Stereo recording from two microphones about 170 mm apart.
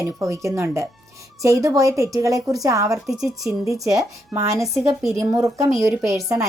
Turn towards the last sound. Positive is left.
turn(degrees=-20)  # may be behind; listen again after turning